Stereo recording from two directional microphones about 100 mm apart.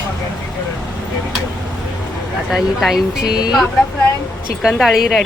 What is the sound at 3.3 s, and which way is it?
Speech, 40° left (ahead or behind).